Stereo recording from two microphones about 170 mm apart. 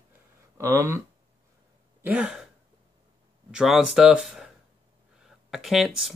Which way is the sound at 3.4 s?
5° right (ahead or behind).